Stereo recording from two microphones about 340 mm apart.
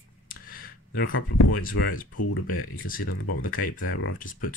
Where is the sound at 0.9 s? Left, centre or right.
Left.